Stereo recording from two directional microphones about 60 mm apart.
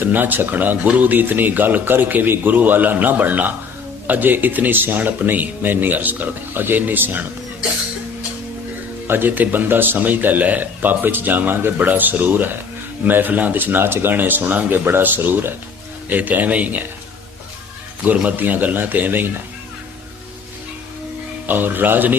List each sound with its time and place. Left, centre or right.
0.0 s a man's voice: right
9.0 s a man's voice: right
18.3 s a man's voice: right
21.4 s a man's voice: right